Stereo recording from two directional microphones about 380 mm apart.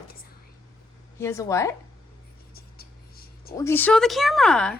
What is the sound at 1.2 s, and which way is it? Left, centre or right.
Speech, centre.